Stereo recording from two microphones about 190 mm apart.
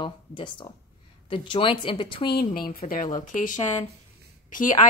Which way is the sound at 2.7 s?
50° left (ahead or behind).